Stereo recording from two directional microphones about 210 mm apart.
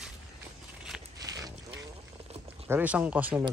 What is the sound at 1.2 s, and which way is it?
Boat, 15° right (ahead or behind).